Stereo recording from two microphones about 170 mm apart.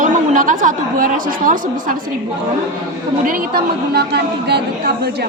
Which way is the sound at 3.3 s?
60° right (ahead or behind).